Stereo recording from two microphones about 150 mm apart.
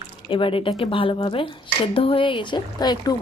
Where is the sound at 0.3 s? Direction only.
35° left (ahead or behind).